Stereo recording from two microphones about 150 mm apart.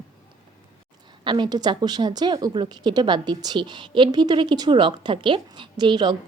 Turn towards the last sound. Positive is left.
turn(degrees=-30)  # may be behind; listen again after turning